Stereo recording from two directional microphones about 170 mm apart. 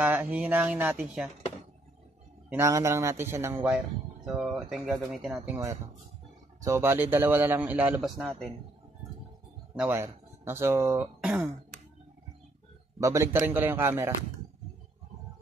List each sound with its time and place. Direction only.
0.0 s a man's voice: 10° right (ahead or behind)
2.5 s a man's voice: 15° right (ahead or behind)
6.6 s a man's voice: 15° right (ahead or behind)
9.8 s a man's voice: 15° right (ahead or behind)
13.0 s a man's voice: 15° right (ahead or behind)